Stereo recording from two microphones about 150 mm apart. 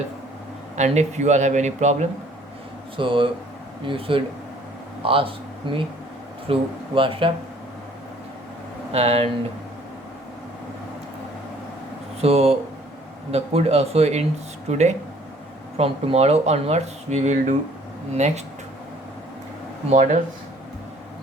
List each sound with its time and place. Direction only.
0.8 s speech: 50° right (ahead or behind)
3.0 s speech: 35° right (ahead or behind)
8.9 s speech: 45° right (ahead or behind)
12.2 s speech: 45° right (ahead or behind)
19.9 s speech: 55° right (ahead or behind)